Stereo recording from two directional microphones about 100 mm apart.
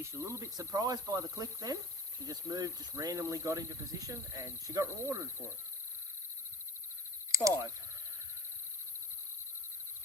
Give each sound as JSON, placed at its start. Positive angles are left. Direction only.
{"t": 0.0, "sound": "speech", "side_deg": -30}
{"t": 7.3, "sound": "speech", "side_deg": -35}